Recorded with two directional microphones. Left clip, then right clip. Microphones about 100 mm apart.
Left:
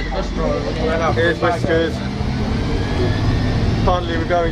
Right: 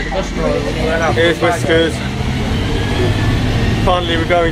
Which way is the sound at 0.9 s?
Centre (ahead or behind).